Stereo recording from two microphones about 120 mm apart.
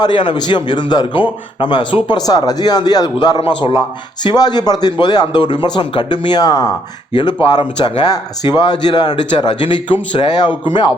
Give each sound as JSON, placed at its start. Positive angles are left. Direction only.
{"t": 0.0, "sound": "a man's voice", "side_deg": 40}